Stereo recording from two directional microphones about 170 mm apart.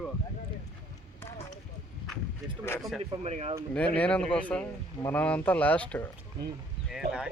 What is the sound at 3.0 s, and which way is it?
Speech, 35° right (ahead or behind).